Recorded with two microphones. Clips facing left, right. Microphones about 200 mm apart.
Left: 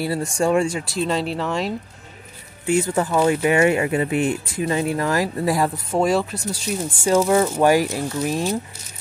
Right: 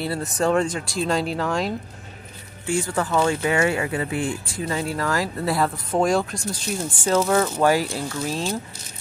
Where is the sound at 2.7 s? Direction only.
20° left (ahead or behind).